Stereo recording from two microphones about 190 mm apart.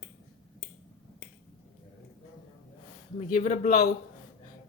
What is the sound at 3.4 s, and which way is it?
Speech, 40° left (ahead or behind).